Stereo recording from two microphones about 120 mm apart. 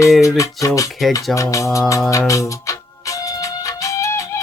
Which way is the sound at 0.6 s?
25° left (ahead or behind).